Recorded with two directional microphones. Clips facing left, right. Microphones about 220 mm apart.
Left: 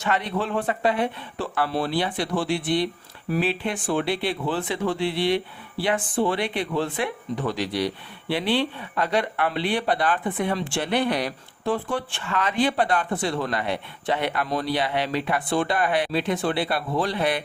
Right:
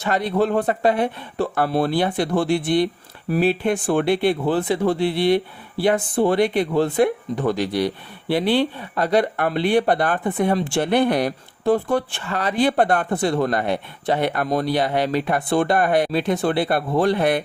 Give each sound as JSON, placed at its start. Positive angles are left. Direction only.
{"t": 0.0, "sound": "speech", "side_deg": -35}
{"t": 12.8, "sound": "speech", "side_deg": -55}
{"t": 13.1, "sound": "speech", "side_deg": -45}